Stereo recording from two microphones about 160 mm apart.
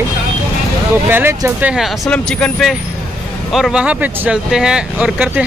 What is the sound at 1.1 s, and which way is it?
Speech, 15° right (ahead or behind).